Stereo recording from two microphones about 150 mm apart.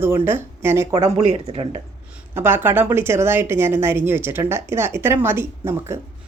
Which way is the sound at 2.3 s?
15° right (ahead or behind).